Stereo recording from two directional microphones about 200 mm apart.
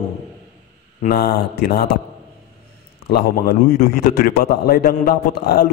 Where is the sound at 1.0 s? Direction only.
50° left (ahead or behind).